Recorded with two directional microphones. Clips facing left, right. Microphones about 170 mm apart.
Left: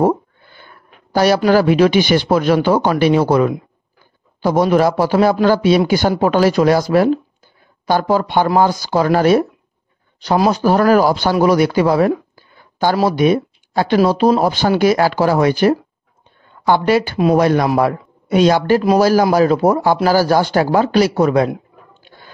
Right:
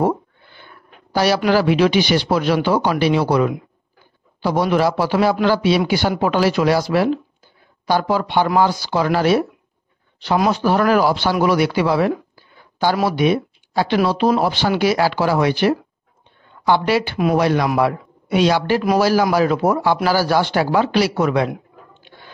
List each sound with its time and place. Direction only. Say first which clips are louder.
0.0 s a man's voice: left 4 dB; 45° left (ahead or behind)